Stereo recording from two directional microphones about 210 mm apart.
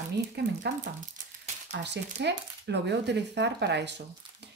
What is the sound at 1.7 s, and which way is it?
Speech, 55° right (ahead or behind).